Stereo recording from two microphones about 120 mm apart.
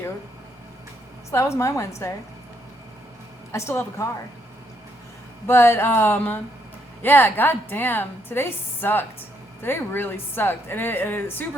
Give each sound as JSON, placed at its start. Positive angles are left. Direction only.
{"t": 1.3, "sound": "speech", "side_deg": 25}
{"t": 3.5, "sound": "speech", "side_deg": 25}
{"t": 5.5, "sound": "a woman's voice", "side_deg": 20}